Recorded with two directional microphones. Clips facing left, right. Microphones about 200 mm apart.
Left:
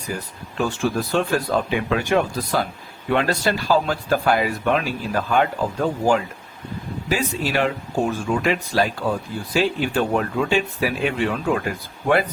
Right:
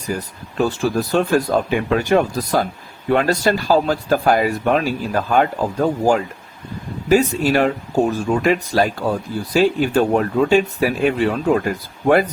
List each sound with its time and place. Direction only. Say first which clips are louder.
0.1 s speech: right 5 dB; 45° right (ahead or behind)